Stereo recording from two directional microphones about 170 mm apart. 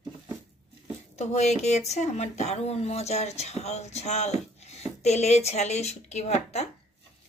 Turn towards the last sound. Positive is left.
turn(degrees=40)  # may be behind; listen again after turning